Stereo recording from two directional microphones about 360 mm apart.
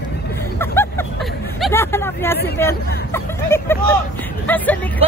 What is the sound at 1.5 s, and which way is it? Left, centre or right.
Speech, centre.